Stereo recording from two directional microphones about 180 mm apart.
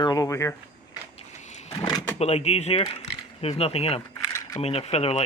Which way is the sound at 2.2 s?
35° left (ahead or behind).